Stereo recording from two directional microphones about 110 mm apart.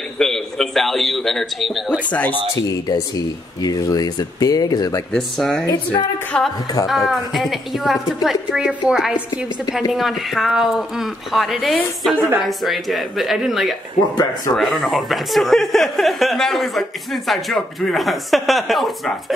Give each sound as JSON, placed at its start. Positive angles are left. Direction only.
{"t": 0.2, "sound": "speech", "side_deg": 5}
{"t": 2.0, "sound": "speech", "side_deg": 15}
{"t": 2.9, "sound": "speech", "side_deg": 35}
{"t": 5.1, "sound": "speech", "side_deg": 5}